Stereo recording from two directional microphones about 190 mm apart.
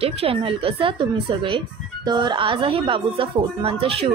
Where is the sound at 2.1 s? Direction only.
25° right (ahead or behind).